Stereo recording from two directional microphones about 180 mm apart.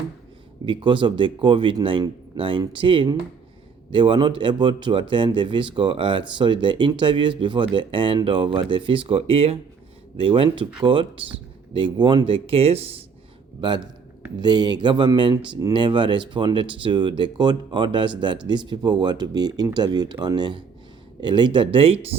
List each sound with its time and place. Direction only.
0.6 s speech: 25° right (ahead or behind)